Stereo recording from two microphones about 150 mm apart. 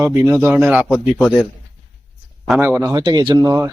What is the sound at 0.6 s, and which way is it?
Speech, centre (ahead or behind).